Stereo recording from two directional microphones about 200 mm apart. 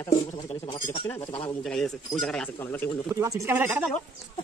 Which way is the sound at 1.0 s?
10° left (ahead or behind).